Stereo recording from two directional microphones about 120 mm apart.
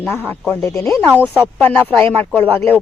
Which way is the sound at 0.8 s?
25° left (ahead or behind).